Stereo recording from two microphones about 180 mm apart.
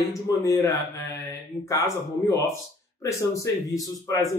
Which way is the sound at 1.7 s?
15° left (ahead or behind).